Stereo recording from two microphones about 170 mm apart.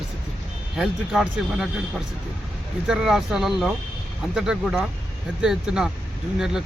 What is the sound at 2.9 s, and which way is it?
Speech, 5° right (ahead or behind).